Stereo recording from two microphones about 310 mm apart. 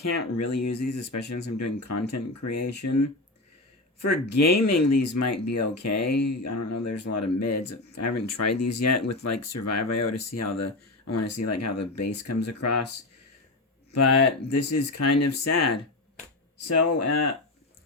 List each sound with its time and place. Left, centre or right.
0.0 s speech: left
0.9 s speech: left
1.5 s speech: left
4.4 s speech: left
14.5 s speech: left